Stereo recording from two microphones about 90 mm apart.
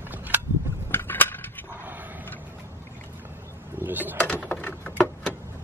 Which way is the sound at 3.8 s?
20° right (ahead or behind).